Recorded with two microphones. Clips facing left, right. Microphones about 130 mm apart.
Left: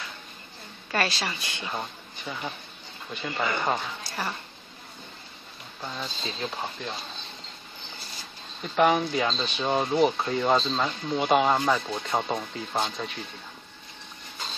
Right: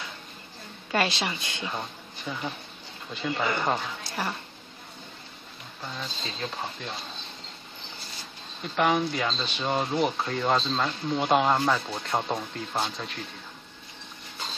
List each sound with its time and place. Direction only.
0.9 s a woman's voice: 15° right (ahead or behind)
1.6 s speech: centre (ahead or behind)
5.9 s speech: 5° left (ahead or behind)
8.7 s speech: centre (ahead or behind)